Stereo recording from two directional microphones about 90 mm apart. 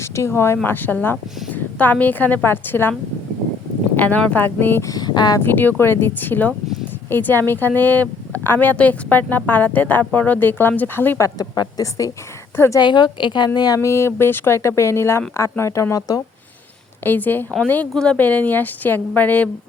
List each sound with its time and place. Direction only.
0.0 s a woman's voice: 30° left (ahead or behind)
3.9 s a woman's voice: 20° left (ahead or behind)
4.8 s speech: 45° left (ahead or behind)
5.4 s a woman's voice: 20° left (ahead or behind)
11.2 s a woman's voice: 45° left (ahead or behind); by 12.8 s 30° left (ahead or behind)
12.8 s a woman's voice: 60° left (ahead or behind)
13.8 s a woman's voice: 30° left (ahead or behind)
17.0 s a woman's voice: 20° left (ahead or behind)